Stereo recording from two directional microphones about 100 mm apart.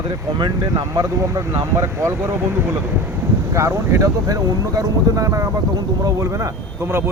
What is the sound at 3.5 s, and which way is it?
Speech, 30° right (ahead or behind).